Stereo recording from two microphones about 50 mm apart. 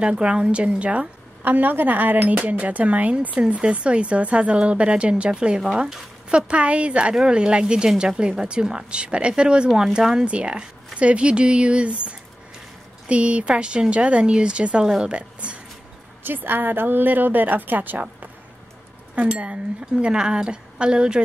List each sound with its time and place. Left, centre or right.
0.0 s speech: centre
1.4 s speech: right; by 10.2 s centre
10.2 s speech: right
16.3 s a woman's voice: right
19.1 s speech: right